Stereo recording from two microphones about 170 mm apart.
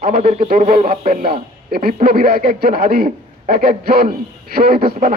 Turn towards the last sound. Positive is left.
turn(degrees=-60)  # may be behind; listen again after turning